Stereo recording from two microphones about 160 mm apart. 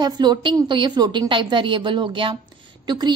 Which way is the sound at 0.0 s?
25° right (ahead or behind).